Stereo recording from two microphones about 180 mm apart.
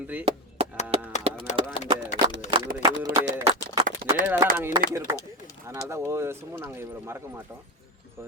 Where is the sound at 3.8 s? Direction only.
50° right (ahead or behind).